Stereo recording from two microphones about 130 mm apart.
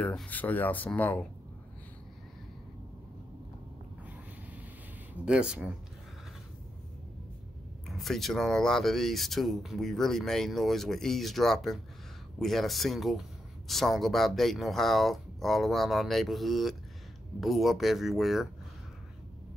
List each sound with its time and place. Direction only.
0.0 s speech: 10° left (ahead or behind)
5.2 s speech: 5° right (ahead or behind)
7.9 s speech: centre (ahead or behind)